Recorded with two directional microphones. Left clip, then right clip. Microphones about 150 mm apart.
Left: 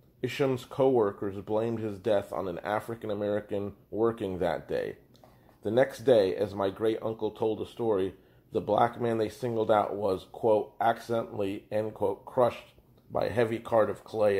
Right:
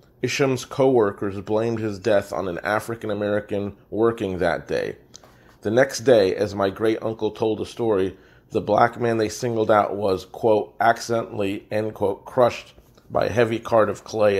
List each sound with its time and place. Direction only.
0.2 s speech: 35° right (ahead or behind)